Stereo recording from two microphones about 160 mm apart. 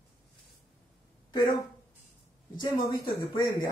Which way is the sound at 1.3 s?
25° left (ahead or behind).